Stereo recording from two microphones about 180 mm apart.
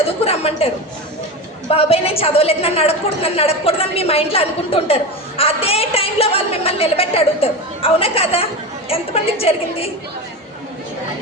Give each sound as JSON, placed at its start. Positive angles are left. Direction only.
{"t": 0.3, "sound": "speech", "side_deg": 35}
{"t": 1.7, "sound": "a woman's voice", "side_deg": 35}